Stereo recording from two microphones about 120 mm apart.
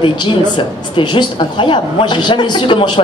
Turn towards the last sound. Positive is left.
turn(degrees=45)  # may be behind; listen again after turning